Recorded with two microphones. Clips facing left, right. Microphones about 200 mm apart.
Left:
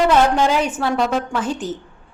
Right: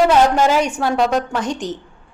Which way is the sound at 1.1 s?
5° left (ahead or behind).